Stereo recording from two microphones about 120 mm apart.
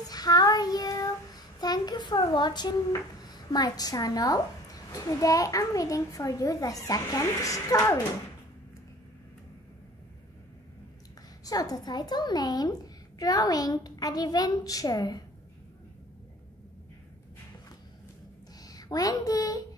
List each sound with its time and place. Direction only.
0.1 s child singing: 35° left (ahead or behind)
11.4 s a woman's voice: 30° left (ahead or behind)
18.6 s a woman's voice: 30° left (ahead or behind)